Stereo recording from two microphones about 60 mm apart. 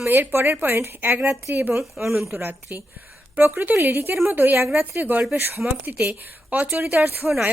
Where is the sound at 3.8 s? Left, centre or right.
Right.